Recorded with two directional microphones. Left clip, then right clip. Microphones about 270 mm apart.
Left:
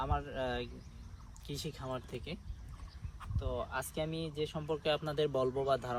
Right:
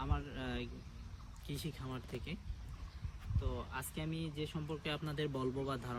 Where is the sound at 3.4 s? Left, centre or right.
Centre.